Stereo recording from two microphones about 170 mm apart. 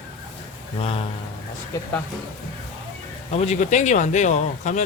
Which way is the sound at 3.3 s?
45° left (ahead or behind).